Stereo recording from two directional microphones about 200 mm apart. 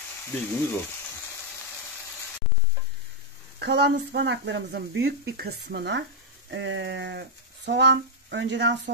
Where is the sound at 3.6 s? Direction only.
55° right (ahead or behind).